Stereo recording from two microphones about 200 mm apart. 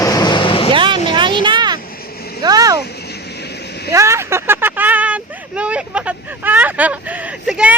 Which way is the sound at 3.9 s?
15° right (ahead or behind).